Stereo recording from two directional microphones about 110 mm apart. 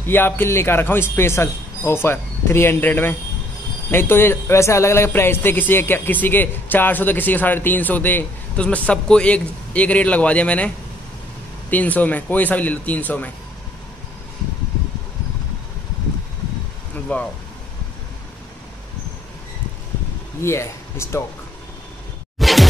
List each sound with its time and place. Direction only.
0.0 s a man's voice: 20° left (ahead or behind)
11.7 s a man's voice: 15° left (ahead or behind)
16.9 s speech: 10° left (ahead or behind)
20.4 s speech: 25° left (ahead or behind)
22.4 s a sound: centre (ahead or behind)